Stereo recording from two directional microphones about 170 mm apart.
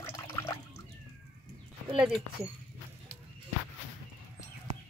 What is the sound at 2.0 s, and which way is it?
Speech, 5° right (ahead or behind).